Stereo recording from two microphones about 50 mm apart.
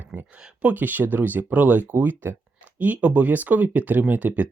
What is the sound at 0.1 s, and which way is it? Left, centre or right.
Speech, right.